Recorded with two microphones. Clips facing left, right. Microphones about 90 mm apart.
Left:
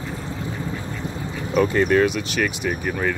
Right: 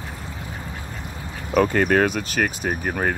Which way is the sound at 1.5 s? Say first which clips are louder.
Even; 50° right (ahead or behind).